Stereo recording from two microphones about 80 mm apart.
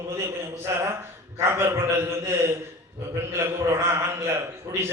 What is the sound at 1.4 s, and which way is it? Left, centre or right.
A man's voice, right.